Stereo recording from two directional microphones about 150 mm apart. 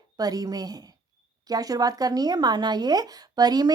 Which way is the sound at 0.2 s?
25° right (ahead or behind).